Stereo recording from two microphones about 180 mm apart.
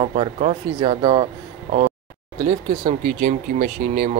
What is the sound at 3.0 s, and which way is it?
Speech, 50° right (ahead or behind).